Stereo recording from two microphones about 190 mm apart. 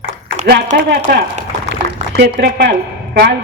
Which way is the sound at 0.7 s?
50° right (ahead or behind).